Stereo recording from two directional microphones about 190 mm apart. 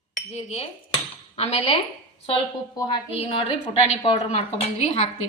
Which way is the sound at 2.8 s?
20° left (ahead or behind).